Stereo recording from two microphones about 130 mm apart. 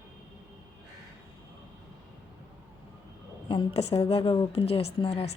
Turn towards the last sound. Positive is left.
turn(degrees=50)  # may be behind; listen again after turning